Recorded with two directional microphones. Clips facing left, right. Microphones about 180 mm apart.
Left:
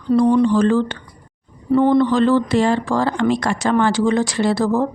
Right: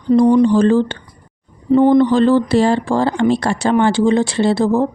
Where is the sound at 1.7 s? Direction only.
20° right (ahead or behind).